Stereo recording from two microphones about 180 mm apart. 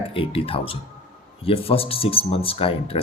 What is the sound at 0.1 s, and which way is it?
Speech, 30° left (ahead or behind).